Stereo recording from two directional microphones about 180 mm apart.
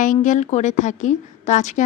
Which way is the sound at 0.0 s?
45° left (ahead or behind).